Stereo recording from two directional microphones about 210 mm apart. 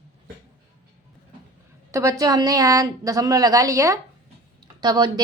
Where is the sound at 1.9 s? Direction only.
15° right (ahead or behind).